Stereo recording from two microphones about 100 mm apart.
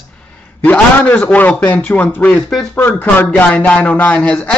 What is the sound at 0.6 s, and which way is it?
Speech, 15° left (ahead or behind).